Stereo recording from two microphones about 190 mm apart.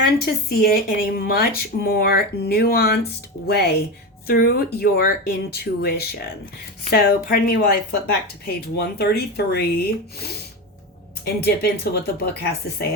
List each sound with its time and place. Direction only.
0.6 s speech: 50° left (ahead or behind)
11.4 s speech: 55° left (ahead or behind)